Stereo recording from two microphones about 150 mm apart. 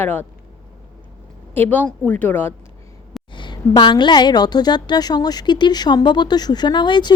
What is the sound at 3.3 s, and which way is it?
A woman's voice, 30° left (ahead or behind).